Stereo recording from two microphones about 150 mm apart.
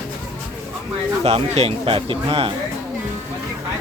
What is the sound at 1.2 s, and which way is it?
Speech, 40° right (ahead or behind).